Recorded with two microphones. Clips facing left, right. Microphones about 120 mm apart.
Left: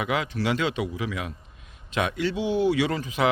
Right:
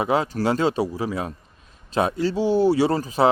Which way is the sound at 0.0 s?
35° right (ahead or behind).